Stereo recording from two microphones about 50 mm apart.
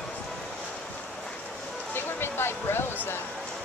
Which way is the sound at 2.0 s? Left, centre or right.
Left.